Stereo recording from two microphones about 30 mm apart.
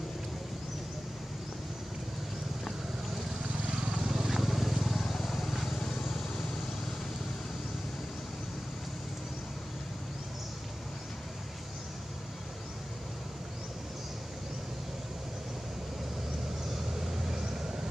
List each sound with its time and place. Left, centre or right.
3.9 s vehicle: centre
17.0 s vehicle: centre